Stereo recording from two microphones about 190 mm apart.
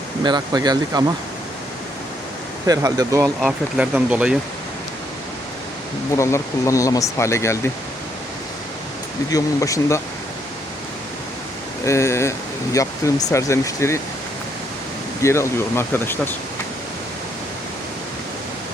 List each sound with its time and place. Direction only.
0.3 s speech: 20° right (ahead or behind)
2.6 s speech: 20° right (ahead or behind)
3.4 s speech: 5° right (ahead or behind)
6.1 s speech: 15° left (ahead or behind)
9.3 s speech: 15° left (ahead or behind)
11.9 s speech: 15° left (ahead or behind)
15.2 s speech: 15° left (ahead or behind)